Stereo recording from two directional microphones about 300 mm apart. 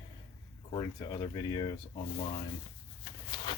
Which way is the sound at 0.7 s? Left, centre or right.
Centre.